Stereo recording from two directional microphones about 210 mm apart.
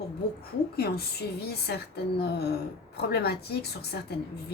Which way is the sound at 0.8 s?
50° left (ahead or behind).